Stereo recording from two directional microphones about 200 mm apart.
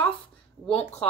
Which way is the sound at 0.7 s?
30° left (ahead or behind).